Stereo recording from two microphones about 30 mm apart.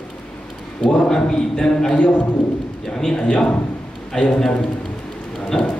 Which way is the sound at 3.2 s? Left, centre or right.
Left.